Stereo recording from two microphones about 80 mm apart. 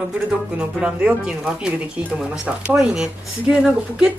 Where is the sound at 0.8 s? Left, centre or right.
Centre.